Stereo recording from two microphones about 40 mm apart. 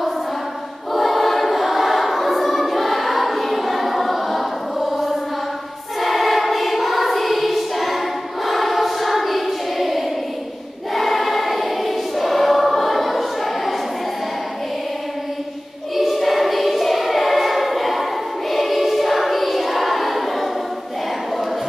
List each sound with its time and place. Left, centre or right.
0.9 s choir: centre
16.0 s choir: centre